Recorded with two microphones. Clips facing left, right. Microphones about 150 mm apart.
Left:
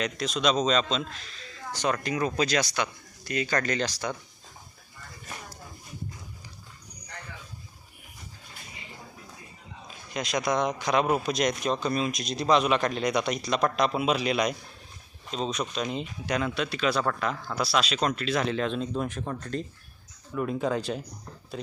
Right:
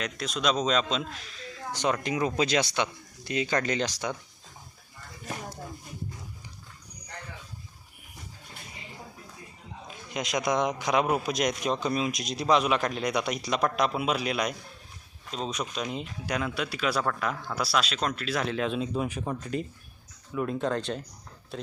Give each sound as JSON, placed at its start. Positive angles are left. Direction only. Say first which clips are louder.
{"t": 0.0, "sound": "a man's voice", "louder": "left 2 dB", "side_deg": 0}
{"t": 10.2, "sound": "a man's voice", "louder": "even", "side_deg": -15}